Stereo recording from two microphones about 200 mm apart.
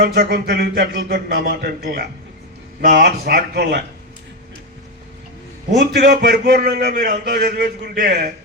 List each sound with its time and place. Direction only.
0.0 s a man's voice: 55° right (ahead or behind)
5.7 s a man's voice: 55° right (ahead or behind)